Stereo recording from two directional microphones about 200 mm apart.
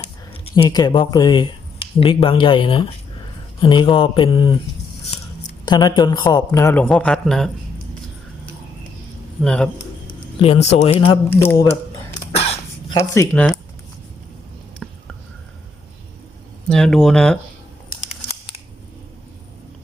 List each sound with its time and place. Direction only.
0.5 s a man's voice: 20° left (ahead or behind)
5.6 s a man's voice: 20° left (ahead or behind); by 7.5 s centre (ahead or behind)
9.4 s a man's voice: 5° left (ahead or behind)
10.4 s a man's voice: 30° left (ahead or behind)
11.3 s speech: 15° left (ahead or behind)
12.3 s throat clearing: 30° left (ahead or behind)
13.0 s speech: 10° left (ahead or behind)
14.8 s a sound: 5° left (ahead or behind)
16.6 s a man's voice: 5° left (ahead or behind)